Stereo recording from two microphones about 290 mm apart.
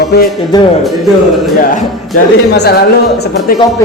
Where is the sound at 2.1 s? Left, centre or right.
Left.